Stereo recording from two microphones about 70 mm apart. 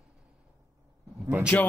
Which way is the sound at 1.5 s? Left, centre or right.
Left.